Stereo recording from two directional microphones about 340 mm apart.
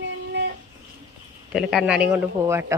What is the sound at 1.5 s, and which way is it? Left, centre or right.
Speech, centre.